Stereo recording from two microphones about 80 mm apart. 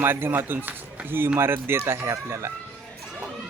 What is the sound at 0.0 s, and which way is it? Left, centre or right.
A man's voice, right.